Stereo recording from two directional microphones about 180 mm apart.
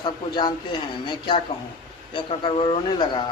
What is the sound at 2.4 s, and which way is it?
Speech, 30° left (ahead or behind).